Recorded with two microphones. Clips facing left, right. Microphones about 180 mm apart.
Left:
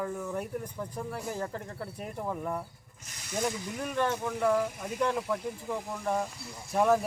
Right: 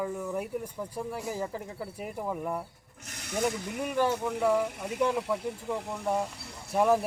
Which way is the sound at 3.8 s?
10° right (ahead or behind).